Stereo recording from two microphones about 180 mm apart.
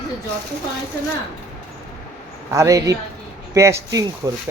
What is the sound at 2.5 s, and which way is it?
A man's voice, 15° right (ahead or behind).